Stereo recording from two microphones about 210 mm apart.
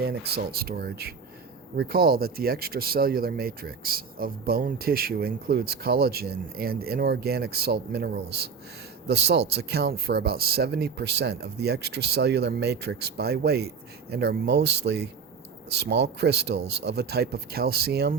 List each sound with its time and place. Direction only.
0.0 s speech: 50° right (ahead or behind)